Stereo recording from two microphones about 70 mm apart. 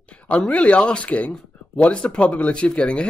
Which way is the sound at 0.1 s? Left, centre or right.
Centre.